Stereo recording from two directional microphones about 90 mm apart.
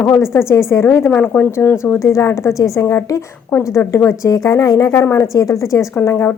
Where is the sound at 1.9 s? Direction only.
35° left (ahead or behind).